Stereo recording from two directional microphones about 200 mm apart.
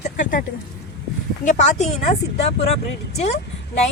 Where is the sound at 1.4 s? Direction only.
35° left (ahead or behind).